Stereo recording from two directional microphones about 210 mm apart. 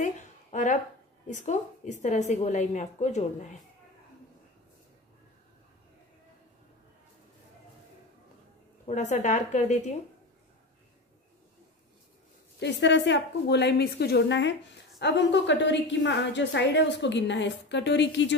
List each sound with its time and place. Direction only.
0.0 s a sound: 35° left (ahead or behind)
1.2 s a woman's voice: 35° left (ahead or behind)
8.8 s a woman's voice: 35° left (ahead or behind)
12.5 s a woman's voice: 55° left (ahead or behind)